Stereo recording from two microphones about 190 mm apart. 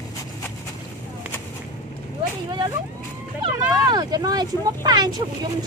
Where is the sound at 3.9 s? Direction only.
20° right (ahead or behind).